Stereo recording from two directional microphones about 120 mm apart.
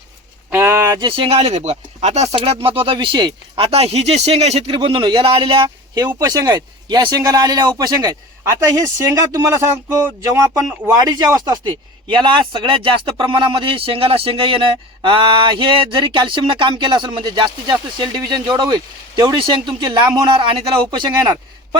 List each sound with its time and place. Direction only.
0.5 s a sound: 20° right (ahead or behind)
0.9 s speech: 45° right (ahead or behind)
3.6 s speech: 55° right (ahead or behind)
4.7 s speech: 45° right (ahead or behind)
6.1 s speech: 30° right (ahead or behind)
11.0 s speech: 35° right (ahead or behind)